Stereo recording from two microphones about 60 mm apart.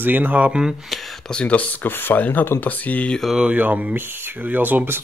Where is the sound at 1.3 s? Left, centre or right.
Left.